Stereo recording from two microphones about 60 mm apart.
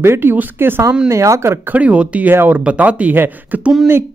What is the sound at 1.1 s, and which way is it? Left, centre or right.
Speech, right.